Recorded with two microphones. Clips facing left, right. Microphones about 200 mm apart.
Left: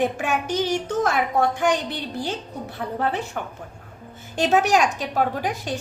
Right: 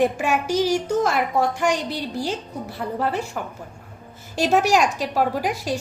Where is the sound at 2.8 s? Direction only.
Centre (ahead or behind).